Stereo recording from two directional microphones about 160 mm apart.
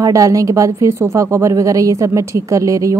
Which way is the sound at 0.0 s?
20° right (ahead or behind).